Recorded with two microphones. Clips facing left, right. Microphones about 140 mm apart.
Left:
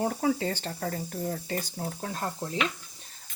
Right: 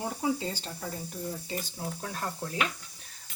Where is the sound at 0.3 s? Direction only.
70° left (ahead or behind).